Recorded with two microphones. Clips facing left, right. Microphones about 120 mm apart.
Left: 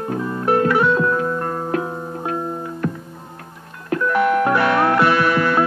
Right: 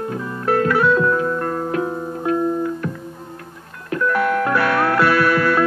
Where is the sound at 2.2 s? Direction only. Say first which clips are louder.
Right 7 dB; 35° left (ahead or behind).